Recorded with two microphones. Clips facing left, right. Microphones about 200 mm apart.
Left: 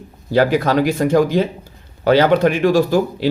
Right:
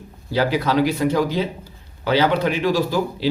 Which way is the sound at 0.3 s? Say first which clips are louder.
Left 4 dB; 50° left (ahead or behind).